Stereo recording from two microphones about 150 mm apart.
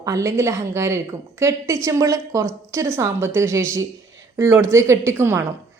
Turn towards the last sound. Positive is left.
turn(degrees=-15)  # may be behind; listen again after turning